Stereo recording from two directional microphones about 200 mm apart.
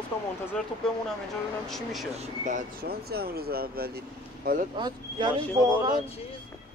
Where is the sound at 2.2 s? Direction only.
40° right (ahead or behind).